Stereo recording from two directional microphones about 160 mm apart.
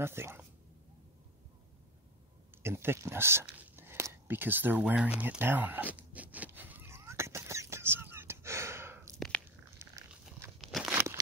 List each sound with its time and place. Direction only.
0.0 s speech: 15° right (ahead or behind)
2.6 s whispering: 15° right (ahead or behind)
9.8 s dog: 15° right (ahead or behind)
10.6 s a sound: centre (ahead or behind)